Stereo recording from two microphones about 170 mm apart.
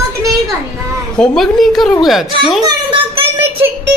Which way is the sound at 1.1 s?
5° left (ahead or behind).